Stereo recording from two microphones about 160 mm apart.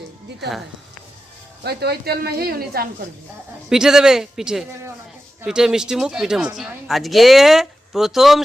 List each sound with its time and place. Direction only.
1.6 s speech: 85° right
3.7 s speech: 5° right (ahead or behind)